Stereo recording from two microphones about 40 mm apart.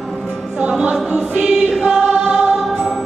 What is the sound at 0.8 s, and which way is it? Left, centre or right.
Choir, right.